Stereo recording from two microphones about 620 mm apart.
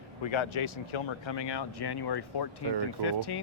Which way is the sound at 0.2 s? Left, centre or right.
Left.